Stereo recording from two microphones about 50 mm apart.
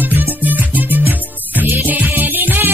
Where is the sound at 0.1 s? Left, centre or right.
Right.